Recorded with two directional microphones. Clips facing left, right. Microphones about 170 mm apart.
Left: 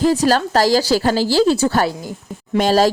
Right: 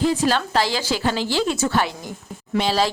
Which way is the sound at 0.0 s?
40° left (ahead or behind).